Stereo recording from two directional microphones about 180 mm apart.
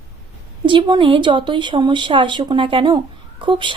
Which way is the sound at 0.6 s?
25° right (ahead or behind).